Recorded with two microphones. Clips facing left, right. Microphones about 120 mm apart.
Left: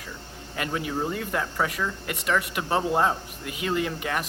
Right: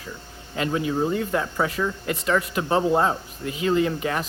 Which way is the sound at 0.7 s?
30° right (ahead or behind).